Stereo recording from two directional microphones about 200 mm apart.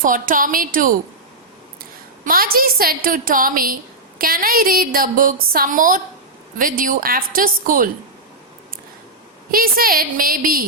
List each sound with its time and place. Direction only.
0.0 s a woman's voice: 45° right (ahead or behind)
2.2 s a woman's voice: 45° right (ahead or behind)
9.5 s a woman's voice: 45° right (ahead or behind)